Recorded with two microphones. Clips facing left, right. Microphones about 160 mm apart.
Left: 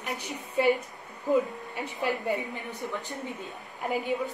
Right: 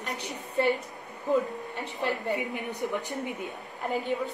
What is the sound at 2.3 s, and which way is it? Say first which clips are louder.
A woman's voice: right 1 dB; 20° right (ahead or behind).